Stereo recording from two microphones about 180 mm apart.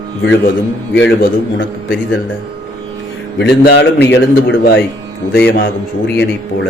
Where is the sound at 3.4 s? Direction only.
65° left (ahead or behind).